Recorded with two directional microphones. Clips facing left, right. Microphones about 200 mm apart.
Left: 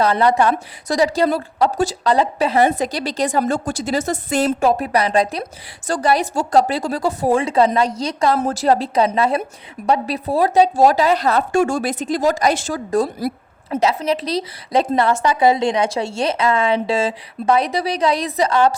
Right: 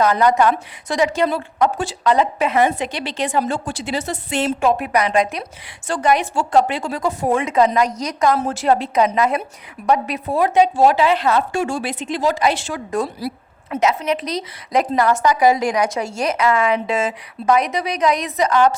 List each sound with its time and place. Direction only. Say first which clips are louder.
0.0 s a woman's voice: even; 30° left (ahead or behind)